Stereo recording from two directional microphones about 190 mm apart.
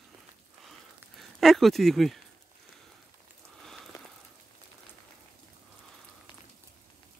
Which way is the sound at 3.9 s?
20° left (ahead or behind).